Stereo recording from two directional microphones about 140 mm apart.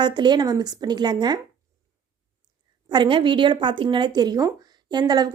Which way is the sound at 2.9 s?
35° right (ahead or behind).